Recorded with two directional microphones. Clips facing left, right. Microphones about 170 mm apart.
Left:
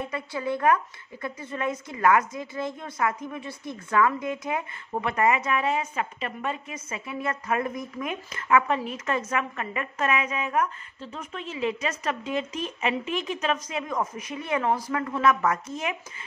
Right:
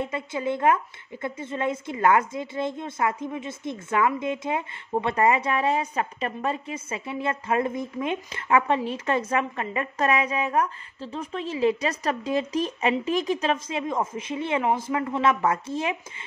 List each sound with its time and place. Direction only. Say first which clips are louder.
0.0 s a woman's voice: right 2 dB; 25° right (ahead or behind)